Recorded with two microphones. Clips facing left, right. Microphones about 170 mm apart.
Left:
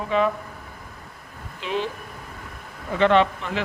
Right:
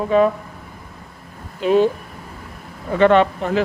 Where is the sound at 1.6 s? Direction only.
45° right (ahead or behind).